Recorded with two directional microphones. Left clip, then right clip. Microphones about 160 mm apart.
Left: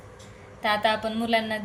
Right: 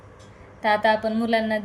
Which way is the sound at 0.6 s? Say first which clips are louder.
Right 4 dB; 30° right (ahead or behind).